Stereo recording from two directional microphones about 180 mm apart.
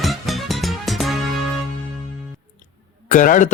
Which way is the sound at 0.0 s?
Centre (ahead or behind).